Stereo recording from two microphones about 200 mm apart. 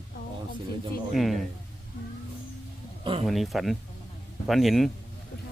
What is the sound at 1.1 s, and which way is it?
Speech, centre (ahead or behind).